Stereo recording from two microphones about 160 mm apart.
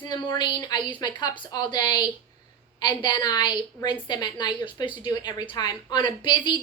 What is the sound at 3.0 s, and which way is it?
A woman's voice, 25° left (ahead or behind).